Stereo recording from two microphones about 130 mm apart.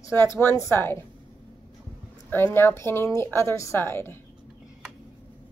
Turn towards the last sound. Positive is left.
turn(degrees=20)  # may be behind; listen again after turning